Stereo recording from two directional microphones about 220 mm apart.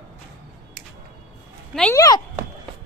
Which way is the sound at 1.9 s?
15° left (ahead or behind).